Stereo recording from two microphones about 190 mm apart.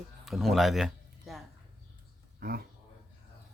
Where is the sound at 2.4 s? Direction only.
50° right (ahead or behind).